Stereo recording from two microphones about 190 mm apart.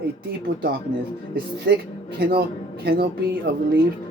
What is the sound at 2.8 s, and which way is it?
Speech, 55° right (ahead or behind).